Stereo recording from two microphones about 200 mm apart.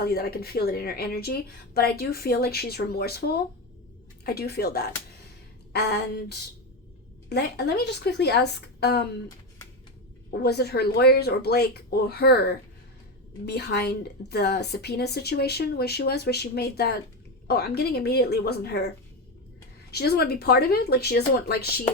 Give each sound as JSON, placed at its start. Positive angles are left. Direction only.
{"t": 0.0, "sound": "a woman's voice", "side_deg": 50}
{"t": 10.4, "sound": "a woman's voice", "side_deg": 55}
{"t": 19.9, "sound": "a woman's voice", "side_deg": 50}